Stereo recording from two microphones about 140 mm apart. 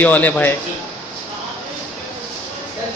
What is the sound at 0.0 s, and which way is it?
Speech, 10° left (ahead or behind).